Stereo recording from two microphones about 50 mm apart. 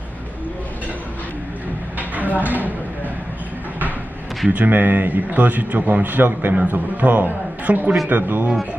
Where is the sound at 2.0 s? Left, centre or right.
Right.